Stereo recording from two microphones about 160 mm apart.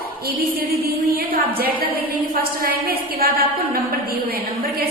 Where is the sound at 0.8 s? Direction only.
70° right (ahead or behind).